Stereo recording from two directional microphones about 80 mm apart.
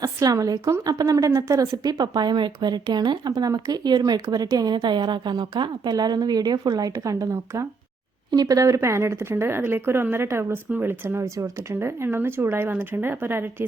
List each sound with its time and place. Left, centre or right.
0.0 s a woman's voice: right
8.3 s a woman's voice: right
11.3 s speech: right